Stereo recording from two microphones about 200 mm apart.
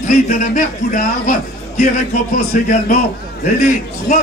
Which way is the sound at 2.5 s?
40° left (ahead or behind).